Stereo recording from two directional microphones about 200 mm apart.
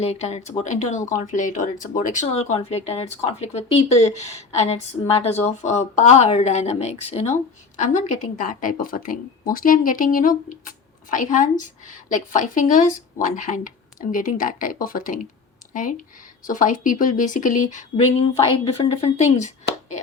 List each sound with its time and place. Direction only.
0.0 s a woman's voice: 30° left (ahead or behind)
16.5 s a woman's voice: 40° left (ahead or behind)
17.9 s a woman's voice: 25° left (ahead or behind)